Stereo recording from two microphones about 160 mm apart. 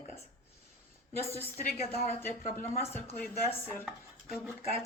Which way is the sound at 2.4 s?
60° left (ahead or behind).